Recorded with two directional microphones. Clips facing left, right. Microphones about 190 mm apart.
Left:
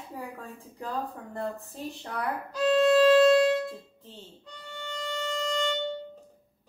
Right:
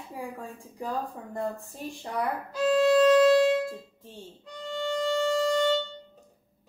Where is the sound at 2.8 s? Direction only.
15° right (ahead or behind).